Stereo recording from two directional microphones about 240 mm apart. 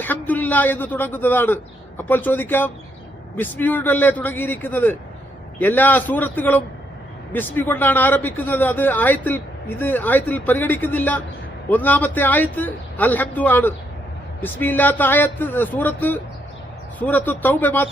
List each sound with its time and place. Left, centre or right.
0.0 s speech: centre